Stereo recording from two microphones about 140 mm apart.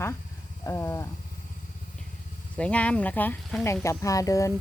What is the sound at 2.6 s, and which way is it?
Speech, 10° left (ahead or behind).